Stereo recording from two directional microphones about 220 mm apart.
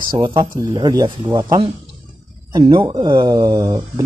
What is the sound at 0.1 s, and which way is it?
Speech, 20° right (ahead or behind).